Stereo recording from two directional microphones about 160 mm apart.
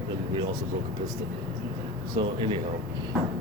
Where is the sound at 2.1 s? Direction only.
30° right (ahead or behind).